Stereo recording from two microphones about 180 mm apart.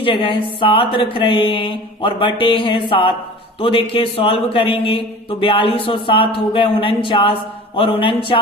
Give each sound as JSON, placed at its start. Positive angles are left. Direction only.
{"t": 0.0, "sound": "speech", "side_deg": 30}